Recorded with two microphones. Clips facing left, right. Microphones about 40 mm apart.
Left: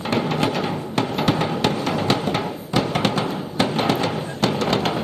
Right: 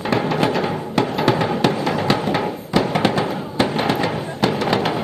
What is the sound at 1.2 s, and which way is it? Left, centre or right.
Music, right.